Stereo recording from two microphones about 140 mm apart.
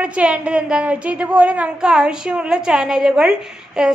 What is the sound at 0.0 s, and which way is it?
A woman's voice, 10° right (ahead or behind).